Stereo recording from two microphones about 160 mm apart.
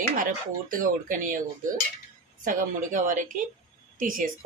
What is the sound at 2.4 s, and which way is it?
Speech, 55° right (ahead or behind).